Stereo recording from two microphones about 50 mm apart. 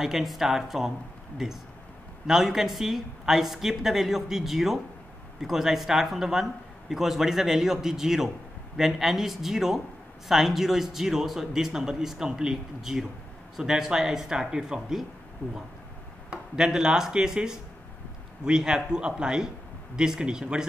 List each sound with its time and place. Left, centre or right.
0.0 s speech: centre
15.4 s speech: left
16.5 s speech: centre